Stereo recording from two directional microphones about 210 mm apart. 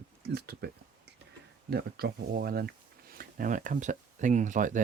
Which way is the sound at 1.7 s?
50° right (ahead or behind).